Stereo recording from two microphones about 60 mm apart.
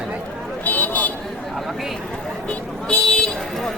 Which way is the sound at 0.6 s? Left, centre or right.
Left.